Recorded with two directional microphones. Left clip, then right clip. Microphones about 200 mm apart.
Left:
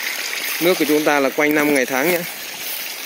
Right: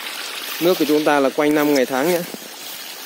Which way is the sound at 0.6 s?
15° left (ahead or behind).